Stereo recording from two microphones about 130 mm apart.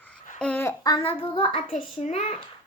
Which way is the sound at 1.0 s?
45° left (ahead or behind).